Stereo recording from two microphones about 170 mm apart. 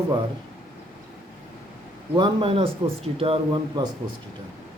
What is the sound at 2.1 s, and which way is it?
A man's voice, 30° right (ahead or behind).